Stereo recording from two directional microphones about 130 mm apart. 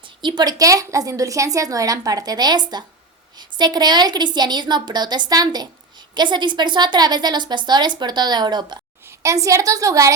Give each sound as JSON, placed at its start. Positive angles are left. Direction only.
{"t": 0.2, "sound": "a woman's voice", "side_deg": -35}